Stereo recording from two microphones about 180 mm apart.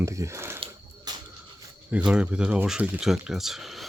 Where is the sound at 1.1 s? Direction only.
20° right (ahead or behind).